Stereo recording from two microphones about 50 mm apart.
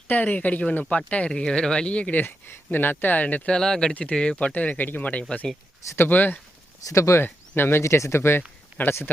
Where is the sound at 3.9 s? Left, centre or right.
Left.